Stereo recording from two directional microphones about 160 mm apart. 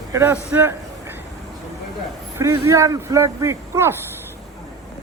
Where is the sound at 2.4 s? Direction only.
20° right (ahead or behind).